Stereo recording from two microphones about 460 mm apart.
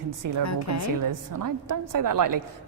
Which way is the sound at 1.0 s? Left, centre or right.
Right.